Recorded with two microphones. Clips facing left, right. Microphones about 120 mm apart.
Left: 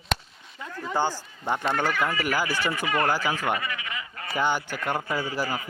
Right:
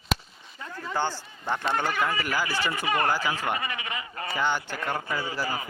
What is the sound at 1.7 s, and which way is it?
Speech, 20° right (ahead or behind).